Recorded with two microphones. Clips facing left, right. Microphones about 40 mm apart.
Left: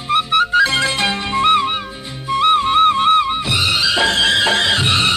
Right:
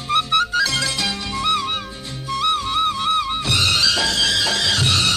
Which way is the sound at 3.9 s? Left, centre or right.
Left.